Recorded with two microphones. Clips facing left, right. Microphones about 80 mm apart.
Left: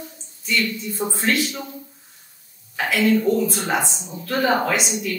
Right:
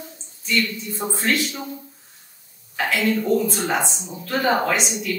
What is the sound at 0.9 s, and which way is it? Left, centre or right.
Speech, centre.